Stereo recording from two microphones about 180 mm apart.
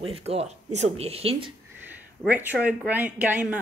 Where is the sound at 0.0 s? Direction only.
35° right (ahead or behind).